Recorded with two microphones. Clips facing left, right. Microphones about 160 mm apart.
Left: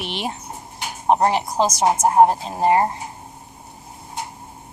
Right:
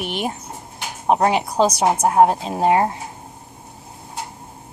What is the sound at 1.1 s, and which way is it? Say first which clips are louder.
A woman's voice: right 3 dB; 70° right (ahead or behind).